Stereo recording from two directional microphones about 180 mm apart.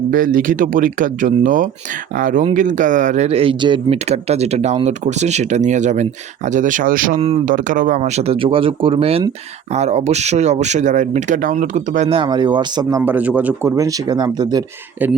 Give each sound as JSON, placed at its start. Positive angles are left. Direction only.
{"t": 0.1, "sound": "speech", "side_deg": -50}
{"t": 12.0, "sound": "speech", "side_deg": -30}